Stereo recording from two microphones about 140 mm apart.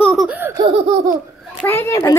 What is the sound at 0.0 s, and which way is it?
Laughter, centre (ahead or behind).